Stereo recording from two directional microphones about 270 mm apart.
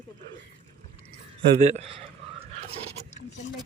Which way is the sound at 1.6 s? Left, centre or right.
Right.